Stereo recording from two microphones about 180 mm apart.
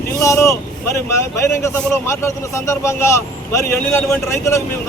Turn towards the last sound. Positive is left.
turn(degrees=15)  # may be behind; listen again after turning